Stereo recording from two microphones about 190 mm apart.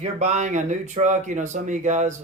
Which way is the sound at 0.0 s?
35° right (ahead or behind).